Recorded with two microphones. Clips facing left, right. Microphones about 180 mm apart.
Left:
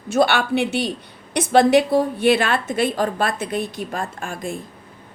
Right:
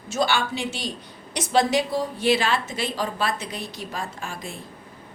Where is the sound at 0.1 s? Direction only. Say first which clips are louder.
Left 6 dB; 60° left (ahead or behind).